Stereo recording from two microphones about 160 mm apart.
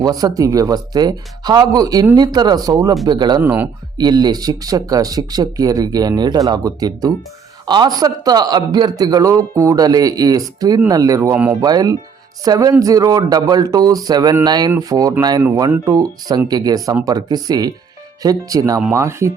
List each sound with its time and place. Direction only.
0.0 s speech: 25° right (ahead or behind)
3.4 s speech: 15° right (ahead or behind)
3.9 s speech: 25° right (ahead or behind)